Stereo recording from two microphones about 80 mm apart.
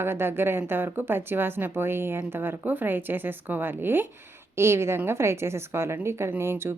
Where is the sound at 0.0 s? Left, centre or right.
Right.